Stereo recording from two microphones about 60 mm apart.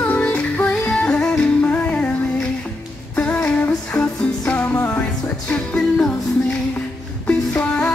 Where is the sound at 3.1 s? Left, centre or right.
Left.